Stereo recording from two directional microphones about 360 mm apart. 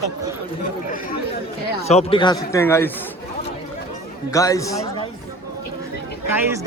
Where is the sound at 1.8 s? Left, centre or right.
Centre.